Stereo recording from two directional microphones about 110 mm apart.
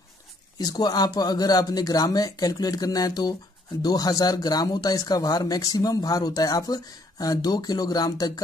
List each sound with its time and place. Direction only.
0.6 s speech: 35° left (ahead or behind)